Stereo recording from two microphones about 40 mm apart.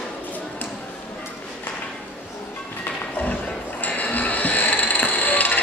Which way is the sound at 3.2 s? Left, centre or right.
Left.